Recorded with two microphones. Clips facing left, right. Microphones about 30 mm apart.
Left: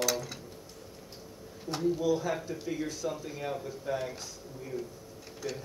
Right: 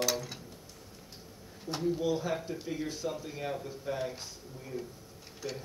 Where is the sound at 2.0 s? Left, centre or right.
Centre.